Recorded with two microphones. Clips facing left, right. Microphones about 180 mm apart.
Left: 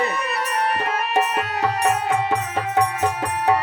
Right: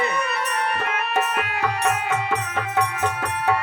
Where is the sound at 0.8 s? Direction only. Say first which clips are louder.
Left 2 dB; 35° left (ahead or behind).